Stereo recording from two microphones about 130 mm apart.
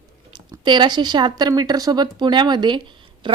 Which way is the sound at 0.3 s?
35° right (ahead or behind).